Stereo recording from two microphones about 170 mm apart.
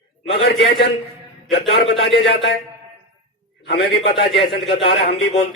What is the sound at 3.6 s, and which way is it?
A man's voice, 85° left.